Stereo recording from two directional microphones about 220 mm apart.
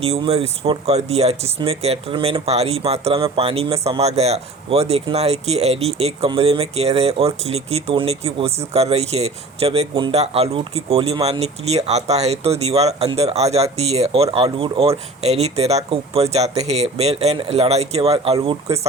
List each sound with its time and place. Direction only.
0.0 s speech: 30° right (ahead or behind)